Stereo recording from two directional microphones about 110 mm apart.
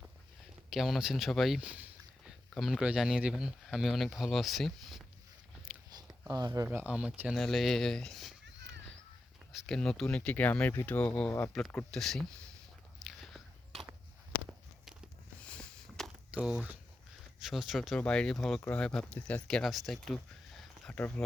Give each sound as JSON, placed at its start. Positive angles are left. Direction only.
{"t": 0.7, "sound": "speech", "side_deg": 0}
{"t": 5.9, "sound": "a sound", "side_deg": -35}
{"t": 6.7, "sound": "speech", "side_deg": -10}
{"t": 7.3, "sound": "speech", "side_deg": 0}
{"t": 9.5, "sound": "speech", "side_deg": 5}
{"t": 13.0, "sound": "biting", "side_deg": 0}
{"t": 15.4, "sound": "a sound", "side_deg": 10}
{"t": 16.3, "sound": "speech", "side_deg": -5}
{"t": 20.6, "sound": "a sound", "side_deg": 5}